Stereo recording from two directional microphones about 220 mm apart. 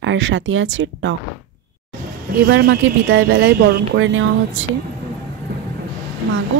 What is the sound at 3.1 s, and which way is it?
A woman's voice, 65° right (ahead or behind).